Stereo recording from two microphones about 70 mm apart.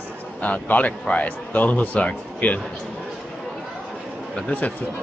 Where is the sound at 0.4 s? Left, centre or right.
Left.